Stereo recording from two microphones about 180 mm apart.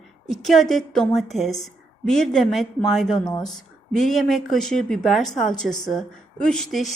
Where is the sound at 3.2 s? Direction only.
20° left (ahead or behind).